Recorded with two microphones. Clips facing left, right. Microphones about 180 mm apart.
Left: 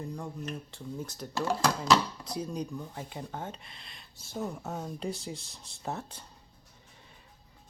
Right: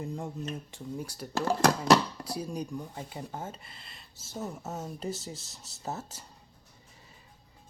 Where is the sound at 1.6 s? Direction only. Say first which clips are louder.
Right 4 dB; 60° right (ahead or behind).